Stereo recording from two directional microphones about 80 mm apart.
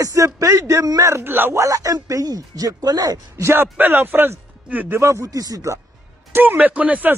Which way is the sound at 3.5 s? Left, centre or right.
Right.